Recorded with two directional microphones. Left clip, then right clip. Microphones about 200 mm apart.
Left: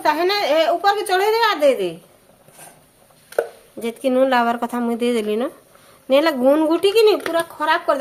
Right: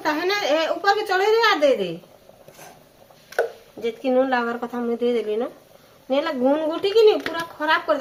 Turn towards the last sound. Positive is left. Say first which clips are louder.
# left 2 dB
turn(degrees=55)  # may be behind; listen again after turning